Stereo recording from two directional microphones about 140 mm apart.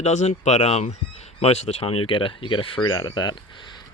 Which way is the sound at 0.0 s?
55° left (ahead or behind).